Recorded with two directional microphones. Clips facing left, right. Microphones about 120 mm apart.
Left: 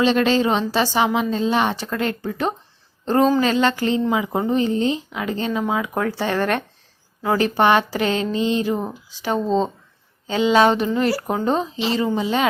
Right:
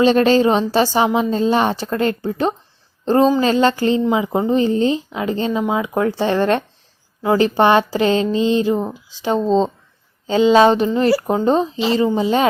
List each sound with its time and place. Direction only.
0.0 s a woman's voice: 40° right (ahead or behind); by 4.5 s 20° right (ahead or behind)
4.5 s a woman's voice: 35° right (ahead or behind)